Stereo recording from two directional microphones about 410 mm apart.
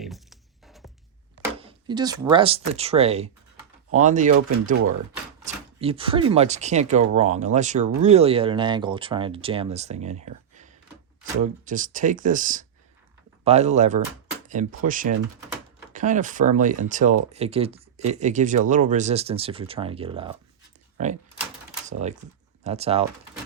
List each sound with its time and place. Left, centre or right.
0.0 s music: centre
1.5 s speech: centre
4.7 s speech: right
5.5 s speech: centre